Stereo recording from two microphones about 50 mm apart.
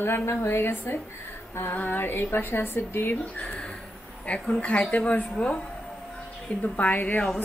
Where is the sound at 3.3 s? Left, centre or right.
Left.